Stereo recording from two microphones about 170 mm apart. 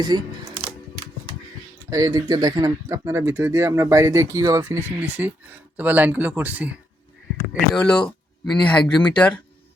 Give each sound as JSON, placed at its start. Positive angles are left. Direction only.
{"t": 0.1, "sound": "speech", "side_deg": -25}
{"t": 1.9, "sound": "speech", "side_deg": -20}
{"t": 7.7, "sound": "speech", "side_deg": 5}